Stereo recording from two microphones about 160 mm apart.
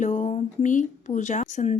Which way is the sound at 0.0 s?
50° left (ahead or behind).